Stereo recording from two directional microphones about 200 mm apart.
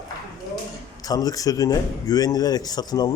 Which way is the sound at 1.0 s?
15° left (ahead or behind).